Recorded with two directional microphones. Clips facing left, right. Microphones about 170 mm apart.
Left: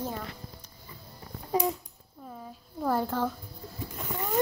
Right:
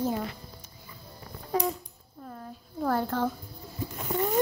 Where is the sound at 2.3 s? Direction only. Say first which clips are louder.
Right 1 dB; 5° left (ahead or behind).